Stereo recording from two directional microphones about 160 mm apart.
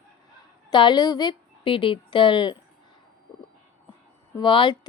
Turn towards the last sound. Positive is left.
turn(degrees=30)  # may be behind; listen again after turning